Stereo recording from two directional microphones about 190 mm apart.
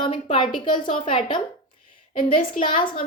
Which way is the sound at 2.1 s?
45° left (ahead or behind).